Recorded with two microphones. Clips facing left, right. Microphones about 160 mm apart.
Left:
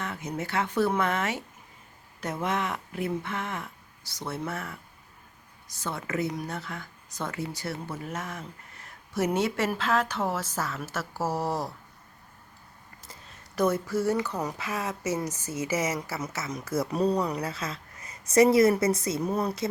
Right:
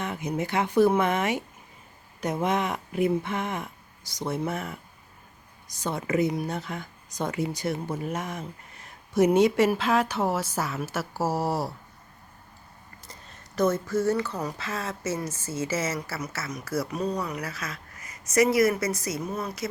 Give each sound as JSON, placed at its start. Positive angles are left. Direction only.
{"t": 0.0, "sound": "speech", "side_deg": -15}
{"t": 13.6, "sound": "speech", "side_deg": 10}
{"t": 17.0, "sound": "speech", "side_deg": 35}